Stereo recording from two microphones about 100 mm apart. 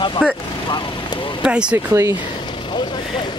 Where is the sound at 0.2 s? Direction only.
10° right (ahead or behind).